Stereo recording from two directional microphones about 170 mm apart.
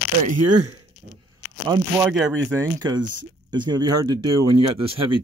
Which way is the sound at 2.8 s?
25° right (ahead or behind).